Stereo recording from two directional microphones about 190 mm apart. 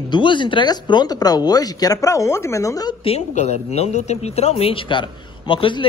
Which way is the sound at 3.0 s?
35° left (ahead or behind).